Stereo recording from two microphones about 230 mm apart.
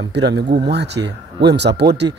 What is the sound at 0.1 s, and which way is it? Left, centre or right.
Speech, right.